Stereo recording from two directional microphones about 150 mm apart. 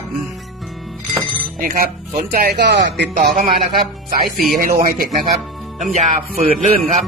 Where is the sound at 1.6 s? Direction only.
70° right (ahead or behind).